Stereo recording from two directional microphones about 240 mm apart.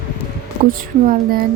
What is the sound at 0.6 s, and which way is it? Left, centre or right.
Speech, right.